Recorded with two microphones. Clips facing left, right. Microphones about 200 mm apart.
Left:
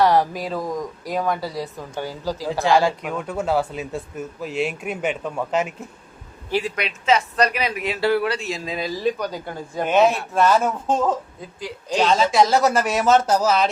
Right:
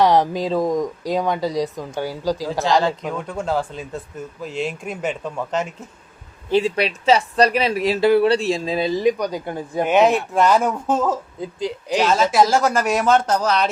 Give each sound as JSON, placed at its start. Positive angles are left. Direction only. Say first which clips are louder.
{"t": 0.0, "sound": "speech", "louder": "right 2 dB", "side_deg": -20}
{"t": 2.5, "sound": "speech", "louder": "left 3 dB", "side_deg": 15}
{"t": 6.5, "sound": "speech", "louder": "right 6 dB", "side_deg": -25}
{"t": 8.0, "sound": "speech", "louder": "right 5 dB", "side_deg": -20}
{"t": 8.3, "sound": "speech", "louder": "right 7 dB", "side_deg": -30}